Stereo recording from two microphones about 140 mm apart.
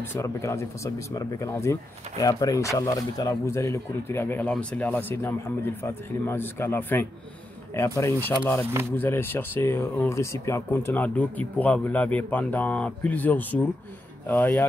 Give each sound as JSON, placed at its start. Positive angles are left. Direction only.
{"t": 0.0, "sound": "speech", "side_deg": 20}